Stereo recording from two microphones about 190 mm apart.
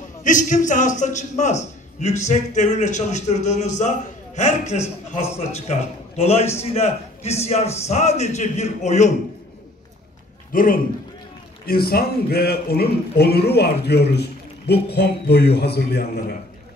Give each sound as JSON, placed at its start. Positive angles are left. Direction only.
{"t": 0.2, "sound": "a man's voice", "side_deg": 40}
{"t": 10.5, "sound": "a man's voice", "side_deg": 45}